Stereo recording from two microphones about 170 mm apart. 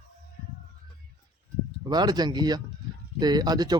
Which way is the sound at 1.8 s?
25° right (ahead or behind).